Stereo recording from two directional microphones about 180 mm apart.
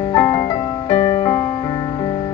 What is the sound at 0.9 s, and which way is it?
Music, 30° left (ahead or behind).